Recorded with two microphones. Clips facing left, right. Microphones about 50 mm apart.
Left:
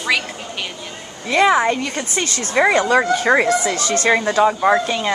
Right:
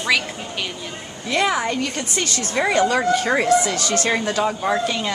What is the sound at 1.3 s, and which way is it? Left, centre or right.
A woman's voice, left.